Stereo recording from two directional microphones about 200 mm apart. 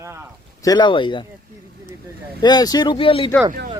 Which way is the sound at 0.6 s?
20° left (ahead or behind).